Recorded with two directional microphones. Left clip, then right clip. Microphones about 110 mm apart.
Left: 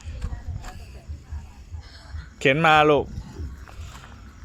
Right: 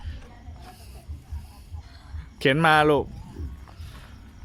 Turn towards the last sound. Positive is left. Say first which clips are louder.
# left 2 dB
turn(degrees=-25)  # may be behind; listen again after turning